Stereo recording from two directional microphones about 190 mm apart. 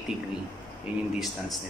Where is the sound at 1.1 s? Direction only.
Centre (ahead or behind).